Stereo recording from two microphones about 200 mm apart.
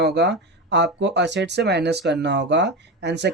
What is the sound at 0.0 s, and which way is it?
Speech, 60° right (ahead or behind).